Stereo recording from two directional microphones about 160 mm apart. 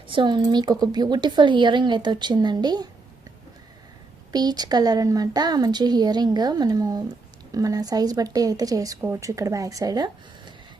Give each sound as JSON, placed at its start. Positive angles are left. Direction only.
{"t": 0.1, "sound": "a woman's voice", "side_deg": -30}
{"t": 4.3, "sound": "a woman's voice", "side_deg": -25}